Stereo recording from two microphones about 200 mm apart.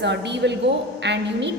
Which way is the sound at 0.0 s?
60° right (ahead or behind).